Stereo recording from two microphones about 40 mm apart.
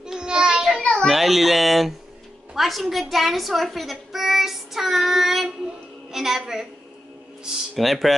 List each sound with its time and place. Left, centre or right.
0.0 s child singing: centre
1.0 s a child's voice: centre
7.7 s a child's voice: centre